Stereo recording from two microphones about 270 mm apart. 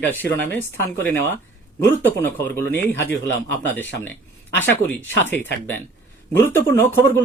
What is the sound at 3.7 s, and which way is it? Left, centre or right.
Speech, centre.